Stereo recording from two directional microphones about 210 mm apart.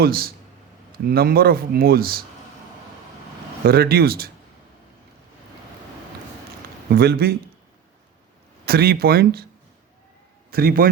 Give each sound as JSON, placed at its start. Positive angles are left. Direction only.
{"t": 0.0, "sound": "speech", "side_deg": -45}
{"t": 3.7, "sound": "speech", "side_deg": -45}
{"t": 6.9, "sound": "speech", "side_deg": -50}
{"t": 8.6, "sound": "speech", "side_deg": -45}
{"t": 10.5, "sound": "speech", "side_deg": -45}